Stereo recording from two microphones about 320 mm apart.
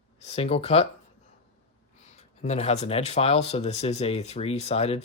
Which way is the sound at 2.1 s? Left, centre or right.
Left.